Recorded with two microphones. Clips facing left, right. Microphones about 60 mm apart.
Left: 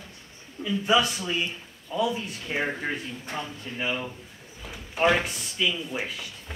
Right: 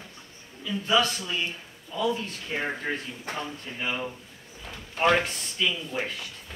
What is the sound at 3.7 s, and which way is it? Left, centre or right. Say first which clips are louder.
Speech: left 2 dB; centre.